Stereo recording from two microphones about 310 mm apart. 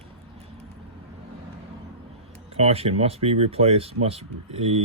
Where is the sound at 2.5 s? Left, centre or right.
Centre.